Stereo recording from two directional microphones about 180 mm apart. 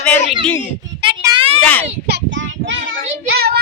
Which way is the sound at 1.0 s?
25° right (ahead or behind).